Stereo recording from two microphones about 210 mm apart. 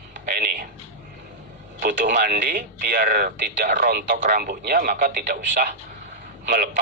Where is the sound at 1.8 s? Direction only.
40° right (ahead or behind).